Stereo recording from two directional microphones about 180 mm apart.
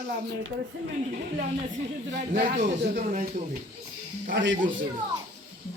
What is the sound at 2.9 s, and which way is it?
Speech, 45° right (ahead or behind).